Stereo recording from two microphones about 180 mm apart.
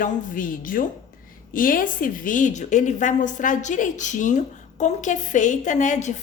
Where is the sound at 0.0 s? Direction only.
50° left (ahead or behind).